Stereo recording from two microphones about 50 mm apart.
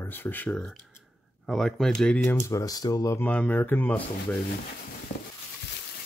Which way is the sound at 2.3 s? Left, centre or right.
Left.